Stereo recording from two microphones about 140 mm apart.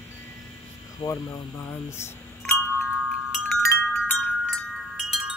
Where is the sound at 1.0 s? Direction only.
25° left (ahead or behind).